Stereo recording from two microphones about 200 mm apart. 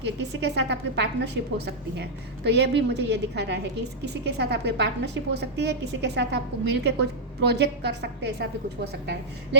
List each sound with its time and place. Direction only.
0.2 s a woman's voice: 60° right (ahead or behind)